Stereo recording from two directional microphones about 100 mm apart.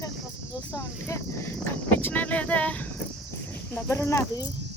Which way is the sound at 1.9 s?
15° left (ahead or behind).